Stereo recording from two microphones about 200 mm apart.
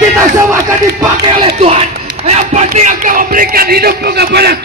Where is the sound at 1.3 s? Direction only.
30° right (ahead or behind).